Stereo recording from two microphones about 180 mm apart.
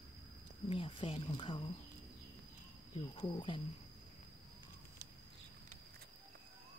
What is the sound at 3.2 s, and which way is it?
Speech, 30° left (ahead or behind).